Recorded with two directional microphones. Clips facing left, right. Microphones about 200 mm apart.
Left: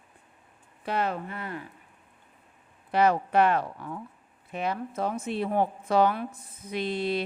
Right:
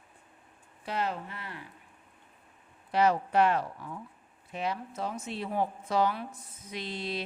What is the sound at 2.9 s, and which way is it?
A woman's voice, 55° left (ahead or behind).